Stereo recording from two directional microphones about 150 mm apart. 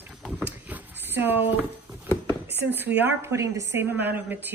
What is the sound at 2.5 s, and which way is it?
A woman's voice, 15° right (ahead or behind).